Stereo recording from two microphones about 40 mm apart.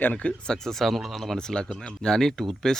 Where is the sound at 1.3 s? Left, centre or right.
Centre.